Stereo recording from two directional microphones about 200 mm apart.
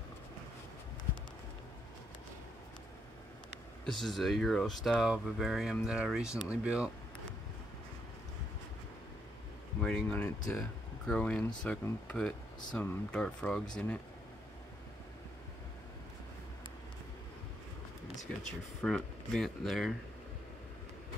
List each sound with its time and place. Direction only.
3.8 s speech: centre (ahead or behind)
9.8 s speech: 5° left (ahead or behind)
18.8 s speech: centre (ahead or behind)